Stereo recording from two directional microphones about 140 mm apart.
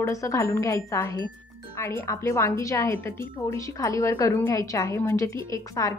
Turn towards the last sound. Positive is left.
turn(degrees=25)  # may be behind; listen again after turning